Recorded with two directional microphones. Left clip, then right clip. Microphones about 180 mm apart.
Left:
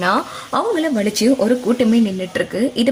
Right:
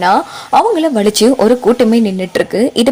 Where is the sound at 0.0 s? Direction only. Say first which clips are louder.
Right 6 dB; 30° right (ahead or behind).